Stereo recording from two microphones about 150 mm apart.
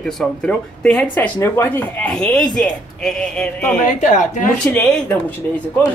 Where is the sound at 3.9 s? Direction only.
55° left (ahead or behind).